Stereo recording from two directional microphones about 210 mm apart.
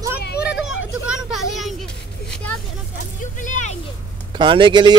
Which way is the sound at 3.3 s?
35° left (ahead or behind).